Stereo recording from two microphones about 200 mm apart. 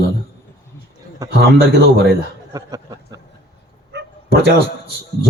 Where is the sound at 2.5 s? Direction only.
20° right (ahead or behind).